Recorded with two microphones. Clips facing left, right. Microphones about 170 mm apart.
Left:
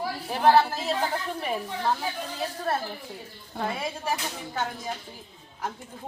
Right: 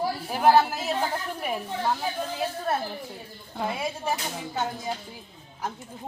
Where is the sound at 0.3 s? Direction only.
5° right (ahead or behind).